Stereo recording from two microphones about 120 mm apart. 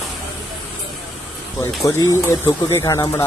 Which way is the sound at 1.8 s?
30° left (ahead or behind).